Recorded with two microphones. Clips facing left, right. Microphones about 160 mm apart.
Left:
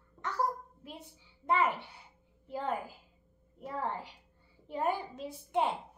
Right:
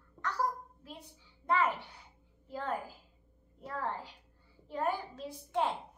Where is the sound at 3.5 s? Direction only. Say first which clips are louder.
Left 1 dB; 20° left (ahead or behind).